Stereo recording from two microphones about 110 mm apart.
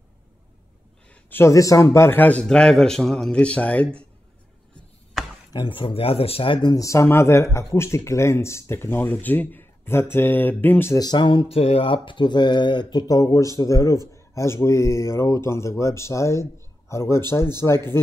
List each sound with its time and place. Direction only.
1.3 s speech: 25° left (ahead or behind); by 4.1 s 10° left (ahead or behind)
5.5 s speech: 45° left (ahead or behind)
6.7 s speech: 30° left (ahead or behind)
11.0 s speech: 40° left (ahead or behind)
11.4 s speech: 65° left (ahead or behind); by 13.0 s 45° left (ahead or behind)
13.0 s speech: 30° left (ahead or behind)